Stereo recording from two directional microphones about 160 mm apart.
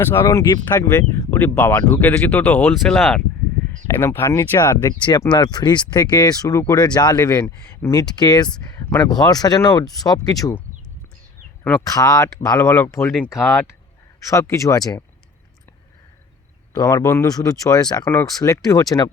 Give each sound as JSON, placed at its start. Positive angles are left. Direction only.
{"t": 0.0, "sound": "speech", "side_deg": 20}
{"t": 1.3, "sound": "speech", "side_deg": 10}
{"t": 3.8, "sound": "speech", "side_deg": 15}
{"t": 11.8, "sound": "speech", "side_deg": 20}
{"t": 14.3, "sound": "speech", "side_deg": 20}
{"t": 16.7, "sound": "speech", "side_deg": 20}